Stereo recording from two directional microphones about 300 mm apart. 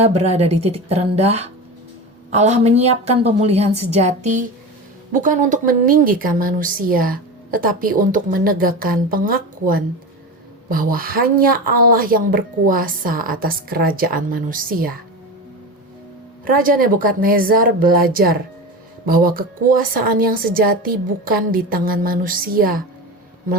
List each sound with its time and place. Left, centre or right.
0.0 s a woman's voice: right
16.6 s a woman's voice: right